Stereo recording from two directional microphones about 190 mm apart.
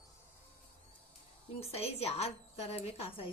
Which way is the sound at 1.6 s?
30° left (ahead or behind).